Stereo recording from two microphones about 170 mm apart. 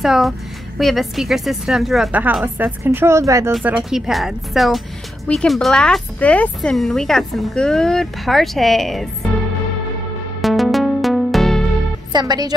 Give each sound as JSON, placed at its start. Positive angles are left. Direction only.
{"t": 0.0, "sound": "speech", "side_deg": 0}
{"t": 3.5, "sound": "speech", "side_deg": -5}
{"t": 10.4, "sound": "music", "side_deg": 0}
{"t": 12.1, "sound": "speech", "side_deg": -25}